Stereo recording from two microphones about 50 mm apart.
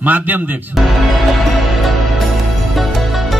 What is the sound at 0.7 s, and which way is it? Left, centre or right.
Speech, centre.